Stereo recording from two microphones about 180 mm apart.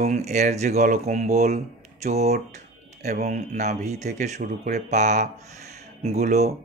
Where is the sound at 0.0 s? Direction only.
40° right (ahead or behind).